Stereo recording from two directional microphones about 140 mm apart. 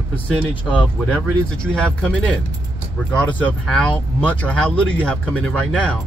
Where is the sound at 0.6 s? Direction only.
10° left (ahead or behind).